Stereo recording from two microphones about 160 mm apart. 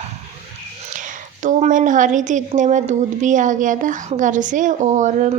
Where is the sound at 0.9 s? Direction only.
50° right (ahead or behind).